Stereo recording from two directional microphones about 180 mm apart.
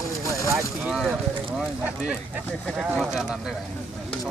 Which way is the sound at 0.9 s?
5° right (ahead or behind).